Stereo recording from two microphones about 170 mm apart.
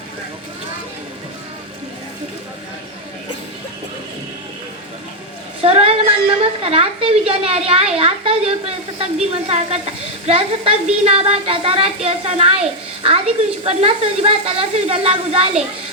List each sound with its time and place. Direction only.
5.6 s a woman's voice: 35° right (ahead or behind)